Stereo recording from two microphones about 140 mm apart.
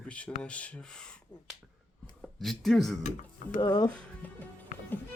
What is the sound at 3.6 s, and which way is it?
Speech, 30° left (ahead or behind).